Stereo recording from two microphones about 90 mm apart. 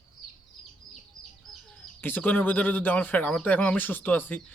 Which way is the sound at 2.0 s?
20° left (ahead or behind).